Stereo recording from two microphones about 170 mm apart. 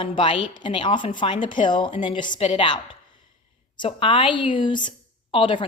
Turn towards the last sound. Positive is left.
turn(degrees=30)  # may be behind; listen again after turning